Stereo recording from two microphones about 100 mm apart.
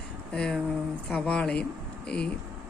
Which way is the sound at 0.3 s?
5° left (ahead or behind).